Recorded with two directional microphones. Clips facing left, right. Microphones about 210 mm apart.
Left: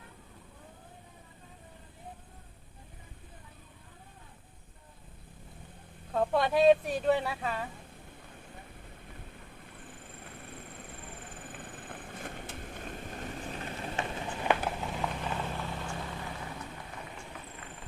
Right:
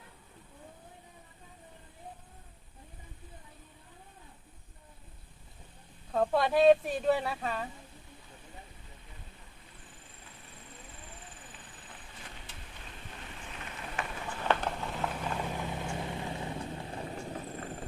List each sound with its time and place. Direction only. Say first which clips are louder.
6.1 s speech: even; centre (ahead or behind)
10.0 s horse: left 7 dB; 60° left (ahead or behind); by 14.3 s 25° left (ahead or behind)
14.4 s a sound: left 1 dB; 5° left (ahead or behind)
15.4 s vehicle: right 1 dB; 15° right (ahead or behind); by 17.8 s 40° right (ahead or behind)